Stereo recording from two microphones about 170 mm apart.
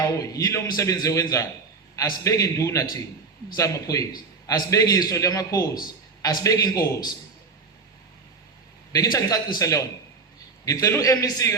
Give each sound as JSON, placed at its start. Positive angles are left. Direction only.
{"t": 0.0, "sound": "a man's voice", "side_deg": 20}
{"t": 8.9, "sound": "a man's voice", "side_deg": 20}